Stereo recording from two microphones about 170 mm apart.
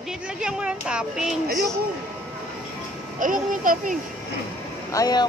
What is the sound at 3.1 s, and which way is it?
Speech, 50° right (ahead or behind).